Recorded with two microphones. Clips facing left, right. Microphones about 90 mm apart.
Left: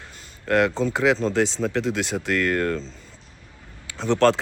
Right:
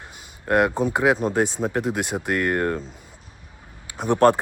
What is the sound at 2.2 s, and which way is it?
Speech, 15° right (ahead or behind).